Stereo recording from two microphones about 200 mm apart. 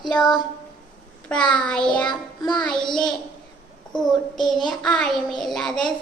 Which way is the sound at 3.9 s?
Centre (ahead or behind).